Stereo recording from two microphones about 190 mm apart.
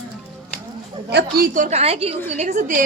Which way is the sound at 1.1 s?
60° right (ahead or behind).